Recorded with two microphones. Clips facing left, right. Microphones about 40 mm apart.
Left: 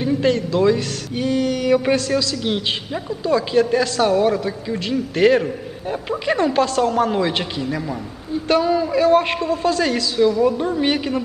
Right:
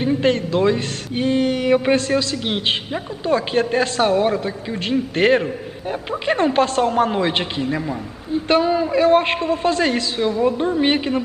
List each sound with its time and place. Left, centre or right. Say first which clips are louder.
0.0 s a man's voice: even; right
6.3 s a man's voice: right 1 dB; right